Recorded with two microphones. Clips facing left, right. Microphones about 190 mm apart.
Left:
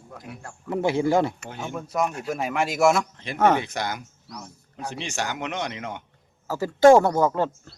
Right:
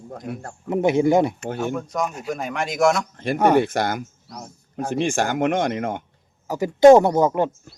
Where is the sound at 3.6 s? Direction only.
50° right (ahead or behind).